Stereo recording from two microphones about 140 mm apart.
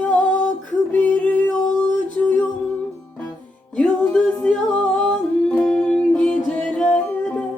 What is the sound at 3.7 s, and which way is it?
Yodeling, 10° left (ahead or behind).